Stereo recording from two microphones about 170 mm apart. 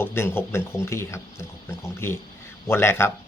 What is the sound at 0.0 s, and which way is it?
Speech, 15° left (ahead or behind).